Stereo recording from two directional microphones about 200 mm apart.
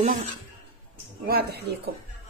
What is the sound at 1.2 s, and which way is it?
Speech, 50° right (ahead or behind).